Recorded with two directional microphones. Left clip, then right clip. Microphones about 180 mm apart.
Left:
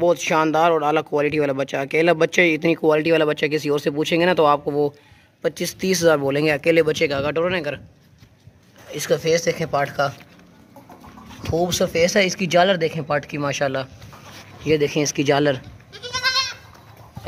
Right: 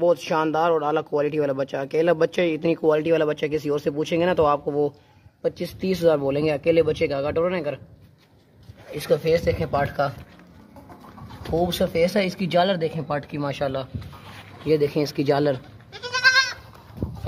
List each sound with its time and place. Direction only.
0.0 s speech: 10° left (ahead or behind)
8.9 s speech: centre (ahead or behind)
11.5 s speech: 5° left (ahead or behind)
14.6 s goat: 5° left (ahead or behind)